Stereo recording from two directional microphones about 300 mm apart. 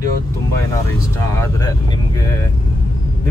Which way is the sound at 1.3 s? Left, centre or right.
Centre.